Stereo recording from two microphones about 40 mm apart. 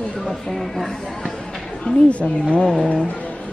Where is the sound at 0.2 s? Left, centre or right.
Centre.